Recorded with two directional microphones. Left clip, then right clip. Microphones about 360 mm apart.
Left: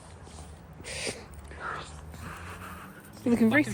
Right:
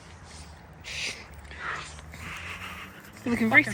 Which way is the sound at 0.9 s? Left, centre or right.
Centre.